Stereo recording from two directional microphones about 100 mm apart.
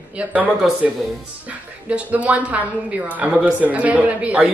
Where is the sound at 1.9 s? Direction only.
15° right (ahead or behind).